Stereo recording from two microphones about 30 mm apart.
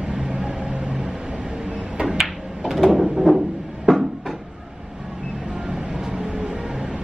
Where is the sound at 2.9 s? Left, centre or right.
Centre.